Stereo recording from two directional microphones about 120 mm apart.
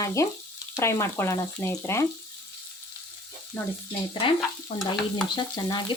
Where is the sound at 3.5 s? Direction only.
20° left (ahead or behind).